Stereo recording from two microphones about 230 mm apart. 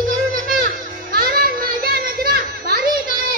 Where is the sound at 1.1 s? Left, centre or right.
Right.